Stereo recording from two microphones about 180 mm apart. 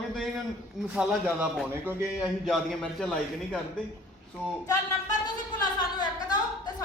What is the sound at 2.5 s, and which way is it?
A man's voice, 5° left (ahead or behind).